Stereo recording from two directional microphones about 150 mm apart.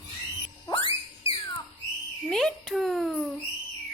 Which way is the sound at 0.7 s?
35° left (ahead or behind).